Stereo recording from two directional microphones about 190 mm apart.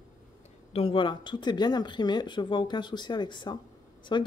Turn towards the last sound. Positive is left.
turn(degrees=25)  # may be behind; listen again after turning